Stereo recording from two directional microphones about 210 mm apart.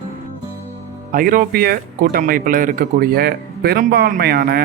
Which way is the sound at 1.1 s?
40° right (ahead or behind).